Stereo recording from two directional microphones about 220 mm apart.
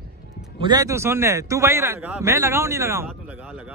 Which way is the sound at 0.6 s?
15° right (ahead or behind).